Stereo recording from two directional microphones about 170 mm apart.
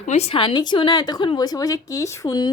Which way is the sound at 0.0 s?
40° left (ahead or behind).